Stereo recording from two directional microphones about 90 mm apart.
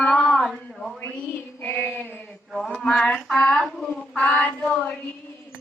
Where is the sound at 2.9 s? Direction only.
5° left (ahead or behind).